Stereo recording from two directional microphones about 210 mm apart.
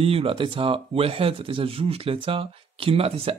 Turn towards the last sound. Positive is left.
turn(degrees=-25)  # may be behind; listen again after turning